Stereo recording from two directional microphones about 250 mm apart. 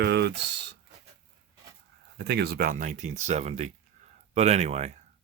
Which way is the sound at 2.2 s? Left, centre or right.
Right.